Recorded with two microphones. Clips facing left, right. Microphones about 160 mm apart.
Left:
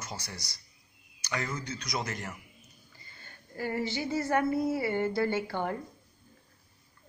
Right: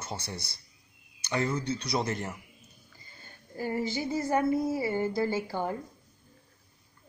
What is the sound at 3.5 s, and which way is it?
A woman's voice, 15° right (ahead or behind).